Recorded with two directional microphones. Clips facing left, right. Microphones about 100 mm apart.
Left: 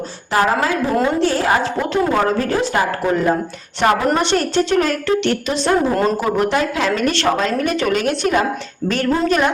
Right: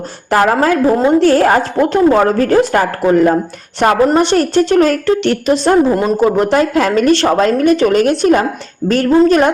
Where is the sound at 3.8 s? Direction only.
40° right (ahead or behind).